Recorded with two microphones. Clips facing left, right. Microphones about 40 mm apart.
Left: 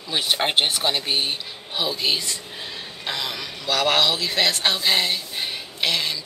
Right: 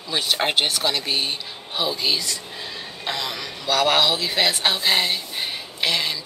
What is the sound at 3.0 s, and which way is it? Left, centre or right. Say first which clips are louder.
Speech: right 1 dB; centre.